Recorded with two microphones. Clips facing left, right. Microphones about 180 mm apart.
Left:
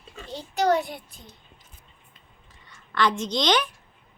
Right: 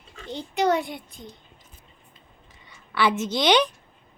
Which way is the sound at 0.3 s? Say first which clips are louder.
Even; 20° right (ahead or behind).